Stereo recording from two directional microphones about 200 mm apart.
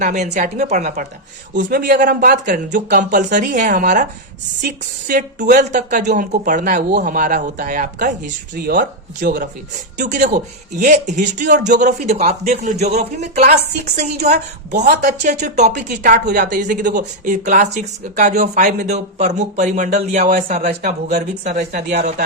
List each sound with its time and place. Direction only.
0.0 s speech: 40° right (ahead or behind)
11.4 s speech: 55° right (ahead or behind)
11.8 s speech: 40° right (ahead or behind)
13.4 s speech: 50° right (ahead or behind)
13.9 s speech: 35° right (ahead or behind)
14.8 s speech: 45° right (ahead or behind)